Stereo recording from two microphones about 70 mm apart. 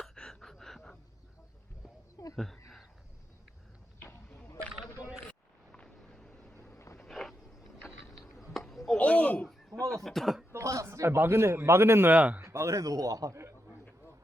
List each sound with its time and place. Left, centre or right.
0.0 s gasp: centre
2.3 s speech: centre
4.4 s a sound: left
5.7 s vehicle: centre
6.6 s vehicle: left
7.1 s a sound: centre
9.0 s a sound: centre
9.9 s speech: centre
10.5 s a man's voice: right
12.1 s speech: centre
12.4 s a man's voice: right